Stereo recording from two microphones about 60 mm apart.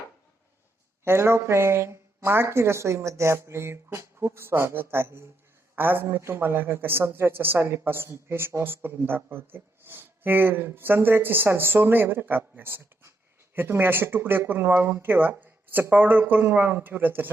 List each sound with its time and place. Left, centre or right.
1.0 s speech: right